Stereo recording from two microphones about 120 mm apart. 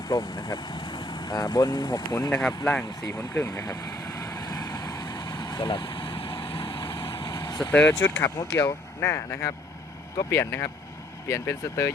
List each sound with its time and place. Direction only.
0.1 s speech: 35° left (ahead or behind)
3.1 s vehicle: 20° left (ahead or behind)
7.7 s speech: 15° left (ahead or behind)